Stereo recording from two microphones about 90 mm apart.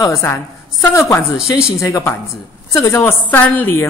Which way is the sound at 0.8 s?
35° left (ahead or behind).